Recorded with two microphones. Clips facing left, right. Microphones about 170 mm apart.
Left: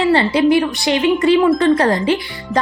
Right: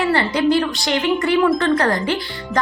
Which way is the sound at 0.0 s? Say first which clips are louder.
Left 4 dB; 25° left (ahead or behind).